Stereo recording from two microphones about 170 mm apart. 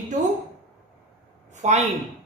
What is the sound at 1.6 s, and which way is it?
Speech, 45° right (ahead or behind).